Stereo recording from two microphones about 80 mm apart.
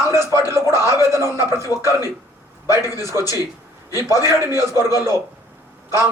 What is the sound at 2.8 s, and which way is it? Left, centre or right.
Speech, left.